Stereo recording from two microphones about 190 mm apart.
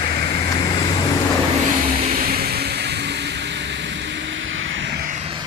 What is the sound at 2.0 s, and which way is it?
Vehicle, 50° right (ahead or behind).